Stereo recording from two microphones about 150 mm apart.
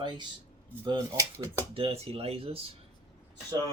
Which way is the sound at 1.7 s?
40° right (ahead or behind).